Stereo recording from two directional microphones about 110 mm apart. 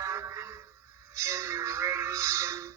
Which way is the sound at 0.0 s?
25° right (ahead or behind).